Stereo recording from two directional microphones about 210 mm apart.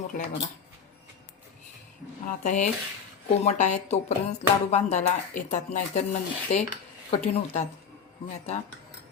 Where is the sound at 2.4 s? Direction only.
35° left (ahead or behind).